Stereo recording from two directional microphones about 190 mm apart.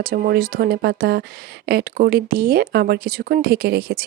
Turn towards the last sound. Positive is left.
turn(degrees=-55)  # may be behind; listen again after turning